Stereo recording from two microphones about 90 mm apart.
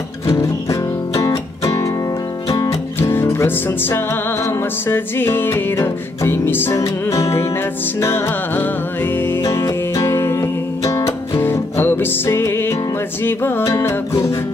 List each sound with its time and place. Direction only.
0.3 s music: 35° left (ahead or behind)
3.0 s music: 25° left (ahead or behind)
6.8 s music: 35° left (ahead or behind)
9.4 s music: 35° left (ahead or behind)
13.7 s music: 35° left (ahead or behind)